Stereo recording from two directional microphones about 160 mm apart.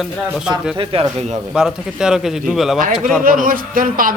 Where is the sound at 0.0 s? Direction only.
5° right (ahead or behind).